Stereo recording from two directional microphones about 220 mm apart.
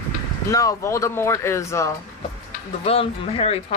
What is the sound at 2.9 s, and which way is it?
Speech, 25° left (ahead or behind).